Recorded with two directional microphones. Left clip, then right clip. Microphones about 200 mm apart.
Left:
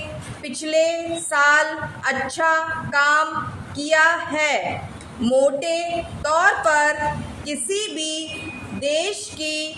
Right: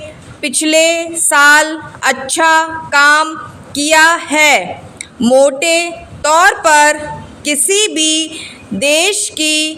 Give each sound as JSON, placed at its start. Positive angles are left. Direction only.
{"t": 0.4, "sound": "a woman's voice", "side_deg": -40}